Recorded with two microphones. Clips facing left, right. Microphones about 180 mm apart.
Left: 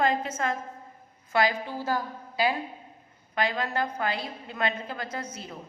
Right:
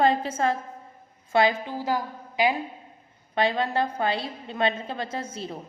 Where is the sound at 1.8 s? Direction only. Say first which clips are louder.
Right 2 dB; 15° right (ahead or behind).